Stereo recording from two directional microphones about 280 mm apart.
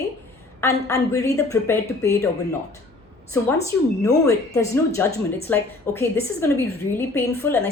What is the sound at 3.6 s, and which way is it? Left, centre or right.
A woman's voice, centre.